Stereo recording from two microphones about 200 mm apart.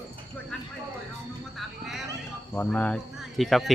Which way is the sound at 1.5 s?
Centre (ahead or behind).